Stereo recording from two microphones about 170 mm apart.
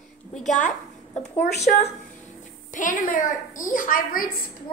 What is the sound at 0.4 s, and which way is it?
A child's voice, 45° left (ahead or behind).